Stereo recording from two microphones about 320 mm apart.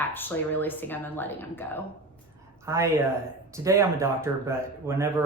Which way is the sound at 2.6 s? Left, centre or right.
Centre.